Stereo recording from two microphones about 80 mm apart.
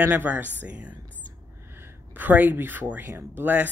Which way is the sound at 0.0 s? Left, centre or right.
Right.